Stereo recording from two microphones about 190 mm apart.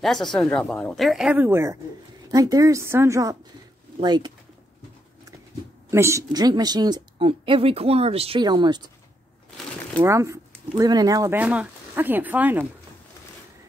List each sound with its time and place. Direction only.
0.0 s a woman's voice: centre (ahead or behind); by 4.3 s 20° right (ahead or behind)
5.9 s speech: 15° right (ahead or behind)
9.9 s speech: 15° right (ahead or behind)
11.3 s speech: 5° right (ahead or behind)